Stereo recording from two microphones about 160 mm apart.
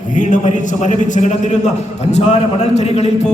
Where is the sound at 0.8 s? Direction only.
45° left (ahead or behind).